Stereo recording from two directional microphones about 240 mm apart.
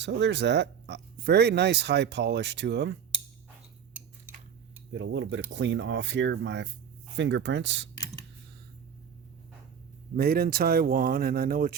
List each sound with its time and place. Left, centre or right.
0.0 s speech: right
4.9 s speech: right
10.2 s speech: right